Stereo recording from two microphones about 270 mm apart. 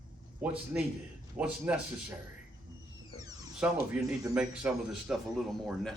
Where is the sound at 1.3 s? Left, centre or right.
Centre.